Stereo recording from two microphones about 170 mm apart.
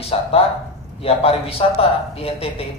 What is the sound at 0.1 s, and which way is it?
Speech, 35° left (ahead or behind).